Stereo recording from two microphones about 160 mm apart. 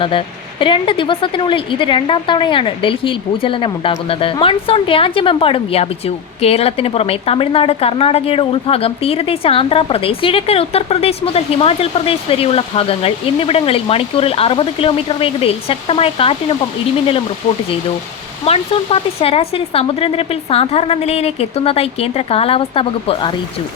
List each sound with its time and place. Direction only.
0.0 s speech: 30° left (ahead or behind)
18.4 s speech: 40° left (ahead or behind)